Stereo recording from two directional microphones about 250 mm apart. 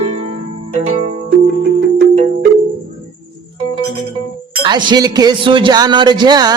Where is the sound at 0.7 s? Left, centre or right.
Right.